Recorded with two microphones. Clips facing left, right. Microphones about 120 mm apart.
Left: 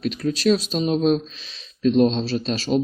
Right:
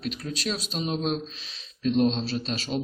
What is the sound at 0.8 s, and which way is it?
Speech, 60° left (ahead or behind).